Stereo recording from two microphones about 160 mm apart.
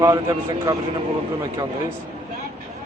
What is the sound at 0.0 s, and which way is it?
Speech, 20° right (ahead or behind).